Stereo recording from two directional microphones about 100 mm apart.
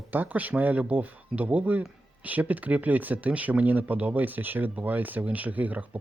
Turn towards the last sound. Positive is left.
turn(degrees=-15)  # may be behind; listen again after turning